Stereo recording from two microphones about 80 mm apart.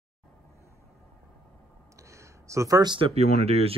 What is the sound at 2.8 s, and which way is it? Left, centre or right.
Speech, right.